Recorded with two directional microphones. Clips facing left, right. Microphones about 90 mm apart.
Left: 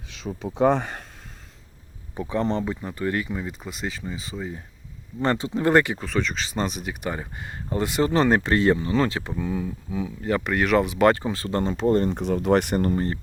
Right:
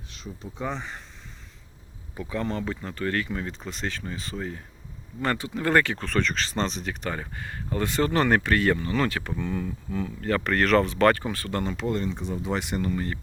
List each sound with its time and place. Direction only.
0.1 s speech: 80° left; by 1.0 s 55° left (ahead or behind)
2.1 s speech: 25° left (ahead or behind); by 4.5 s 5° left (ahead or behind)
5.2 s speech: 25° left (ahead or behind)
6.1 s speech: 5° left (ahead or behind); by 9.3 s 25° left (ahead or behind)
9.3 s speech: 10° left (ahead or behind); by 13.2 s 35° left (ahead or behind)